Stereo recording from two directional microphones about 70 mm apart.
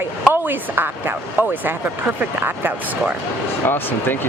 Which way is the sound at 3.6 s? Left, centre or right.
Left.